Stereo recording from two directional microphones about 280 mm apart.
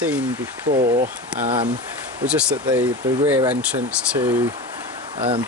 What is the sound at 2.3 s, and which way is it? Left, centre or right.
Speech, centre.